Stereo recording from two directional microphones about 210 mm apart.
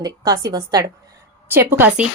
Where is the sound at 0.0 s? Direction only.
20° right (ahead or behind).